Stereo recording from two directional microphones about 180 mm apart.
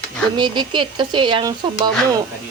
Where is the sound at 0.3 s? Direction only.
25° right (ahead or behind).